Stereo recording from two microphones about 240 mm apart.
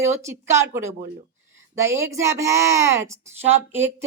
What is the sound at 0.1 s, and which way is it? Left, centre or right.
Speech, centre.